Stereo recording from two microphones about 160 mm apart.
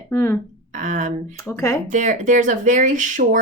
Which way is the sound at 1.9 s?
50° right (ahead or behind).